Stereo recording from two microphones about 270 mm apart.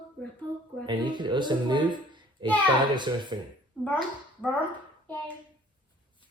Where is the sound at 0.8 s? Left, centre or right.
Centre.